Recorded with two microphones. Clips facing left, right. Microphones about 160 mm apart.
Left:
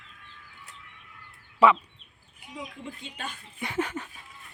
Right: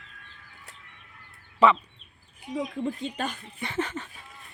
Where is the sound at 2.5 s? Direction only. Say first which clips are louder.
Right 10 dB; 40° right (ahead or behind).